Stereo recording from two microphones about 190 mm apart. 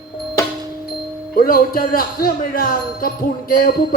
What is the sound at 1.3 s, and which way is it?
Speech, 50° left (ahead or behind).